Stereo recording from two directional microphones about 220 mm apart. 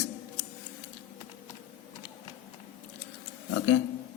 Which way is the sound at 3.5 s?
55° left (ahead or behind).